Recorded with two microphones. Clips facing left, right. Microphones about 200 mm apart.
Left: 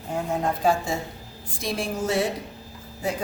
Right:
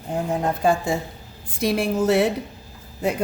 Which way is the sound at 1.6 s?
65° right (ahead or behind).